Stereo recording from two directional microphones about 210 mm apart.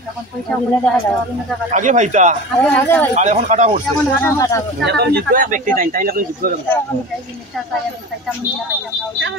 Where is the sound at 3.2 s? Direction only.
35° right (ahead or behind).